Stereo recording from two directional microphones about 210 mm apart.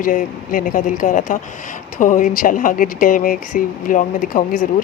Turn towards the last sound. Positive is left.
turn(degrees=40)  # may be behind; listen again after turning